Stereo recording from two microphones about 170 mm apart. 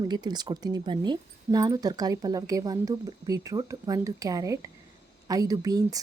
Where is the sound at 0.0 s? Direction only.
25° right (ahead or behind).